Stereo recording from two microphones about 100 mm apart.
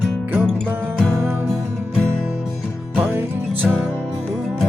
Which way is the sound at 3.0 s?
25° right (ahead or behind).